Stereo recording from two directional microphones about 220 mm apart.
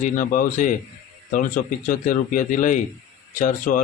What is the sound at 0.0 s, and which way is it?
Speech, 35° left (ahead or behind).